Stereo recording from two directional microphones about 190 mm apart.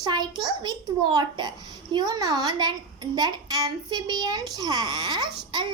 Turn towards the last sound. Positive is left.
turn(degrees=-20)  # may be behind; listen again after turning